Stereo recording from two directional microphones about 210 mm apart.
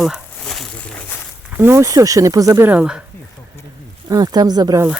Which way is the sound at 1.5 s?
10° right (ahead or behind).